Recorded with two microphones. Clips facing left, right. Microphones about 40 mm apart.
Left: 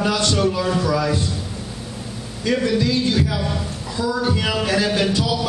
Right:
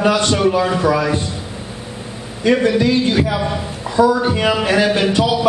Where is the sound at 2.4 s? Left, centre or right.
Right.